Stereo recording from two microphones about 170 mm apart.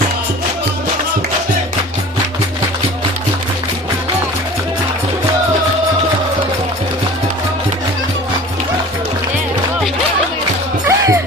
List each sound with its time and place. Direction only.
10.8 s music: 15° right (ahead or behind)